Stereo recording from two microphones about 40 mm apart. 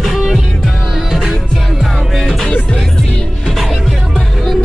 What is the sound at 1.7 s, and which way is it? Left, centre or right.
Music, centre.